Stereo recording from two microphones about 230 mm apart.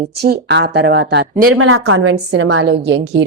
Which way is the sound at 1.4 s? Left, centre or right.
Right.